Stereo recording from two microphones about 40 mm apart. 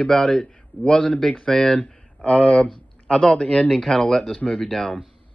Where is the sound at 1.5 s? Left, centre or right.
Centre.